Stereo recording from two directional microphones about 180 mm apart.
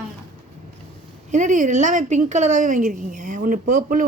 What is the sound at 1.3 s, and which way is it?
A woman's voice, 45° right (ahead or behind).